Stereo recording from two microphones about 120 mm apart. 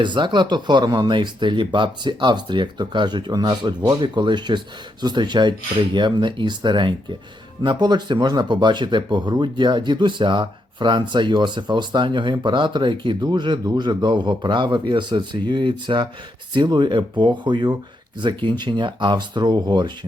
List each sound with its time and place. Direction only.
0.0 s speech: 40° right (ahead or behind)